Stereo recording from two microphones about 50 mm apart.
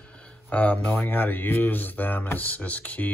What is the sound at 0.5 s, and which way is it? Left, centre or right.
Speech, left.